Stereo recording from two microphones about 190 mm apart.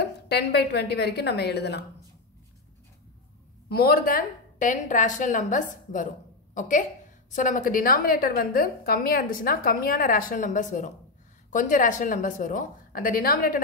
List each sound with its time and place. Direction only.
0.0 s a woman's voice: 60° left (ahead or behind)
3.6 s a woman's voice: 55° left (ahead or behind)